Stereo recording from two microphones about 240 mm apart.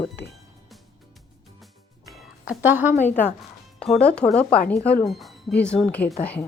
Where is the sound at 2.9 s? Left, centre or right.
Left.